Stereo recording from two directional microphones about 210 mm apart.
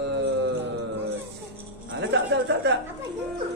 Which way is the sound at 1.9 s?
55° right (ahead or behind).